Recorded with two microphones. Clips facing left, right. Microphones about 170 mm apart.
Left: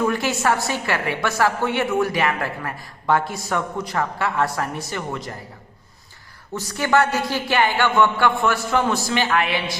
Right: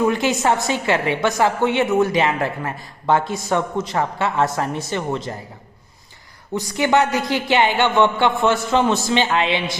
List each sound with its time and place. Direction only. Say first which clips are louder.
0.0 s a woman's voice: right 3 dB; 20° right (ahead or behind)
6.5 s a woman's voice: right 2 dB; 20° right (ahead or behind)